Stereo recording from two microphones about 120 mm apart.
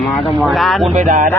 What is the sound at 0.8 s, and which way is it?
Music, 90° right.